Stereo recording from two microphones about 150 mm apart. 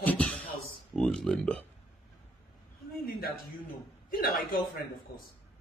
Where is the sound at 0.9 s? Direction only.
5° left (ahead or behind).